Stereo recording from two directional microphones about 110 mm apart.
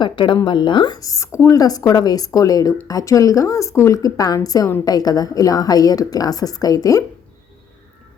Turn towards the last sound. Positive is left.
turn(degrees=30)  # may be behind; listen again after turning